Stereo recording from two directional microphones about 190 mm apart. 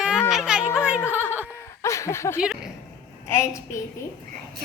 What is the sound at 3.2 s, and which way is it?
Speech, 15° left (ahead or behind).